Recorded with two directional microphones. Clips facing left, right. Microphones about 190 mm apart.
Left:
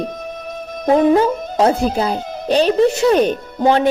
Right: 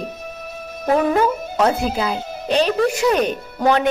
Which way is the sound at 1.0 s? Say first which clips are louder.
Left 6 dB; 25° left (ahead or behind).